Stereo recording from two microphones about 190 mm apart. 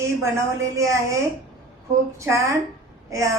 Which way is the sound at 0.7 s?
15° right (ahead or behind).